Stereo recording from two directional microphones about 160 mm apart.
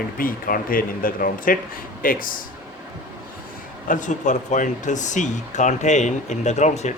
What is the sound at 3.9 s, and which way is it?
Speech, 50° left (ahead or behind).